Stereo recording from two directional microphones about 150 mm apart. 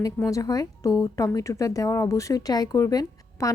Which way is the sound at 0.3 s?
25° left (ahead or behind).